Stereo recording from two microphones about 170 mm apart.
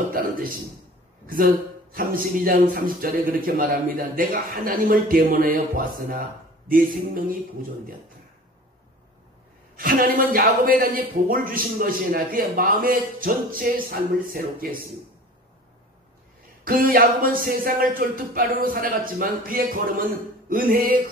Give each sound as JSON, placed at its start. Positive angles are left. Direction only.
{"t": 1.2, "sound": "speech", "side_deg": -55}
{"t": 9.8, "sound": "speech", "side_deg": -55}
{"t": 16.6, "sound": "speech", "side_deg": -55}